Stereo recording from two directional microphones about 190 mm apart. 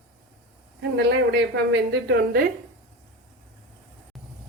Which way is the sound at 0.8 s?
60° right (ahead or behind).